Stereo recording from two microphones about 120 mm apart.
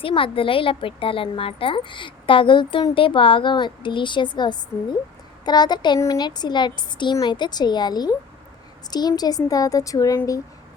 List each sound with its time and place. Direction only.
0.0 s a woman's voice: 45° left (ahead or behind); by 10.2 s 30° left (ahead or behind)